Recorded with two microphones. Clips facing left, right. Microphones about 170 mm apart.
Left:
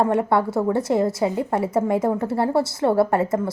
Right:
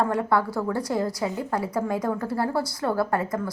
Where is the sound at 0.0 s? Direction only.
25° left (ahead or behind).